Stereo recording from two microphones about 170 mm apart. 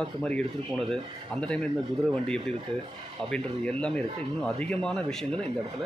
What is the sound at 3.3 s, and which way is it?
Speech, 5° left (ahead or behind).